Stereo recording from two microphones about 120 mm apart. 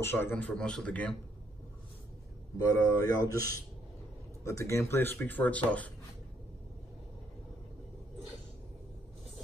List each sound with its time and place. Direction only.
0.0 s speech: 20° left (ahead or behind)
2.6 s speech: 30° left (ahead or behind); by 5.9 s 10° left (ahead or behind)